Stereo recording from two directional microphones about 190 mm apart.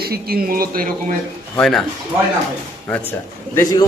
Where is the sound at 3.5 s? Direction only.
15° left (ahead or behind).